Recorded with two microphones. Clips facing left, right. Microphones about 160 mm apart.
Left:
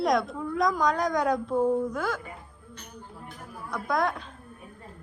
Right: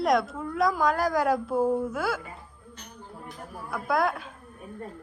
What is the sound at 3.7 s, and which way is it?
Speech, 5° right (ahead or behind).